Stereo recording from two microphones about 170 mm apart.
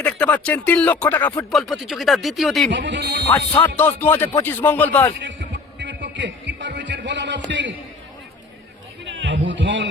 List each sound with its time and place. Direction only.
0.0 s speech: 5° left (ahead or behind)
1.5 s speech: centre (ahead or behind)
2.6 s speech: 90° right; by 3.2 s 70° right (ahead or behind)
3.2 s speech: 10° left (ahead or behind)
5.2 s music: 90° right
9.0 s a man's voice: 90° right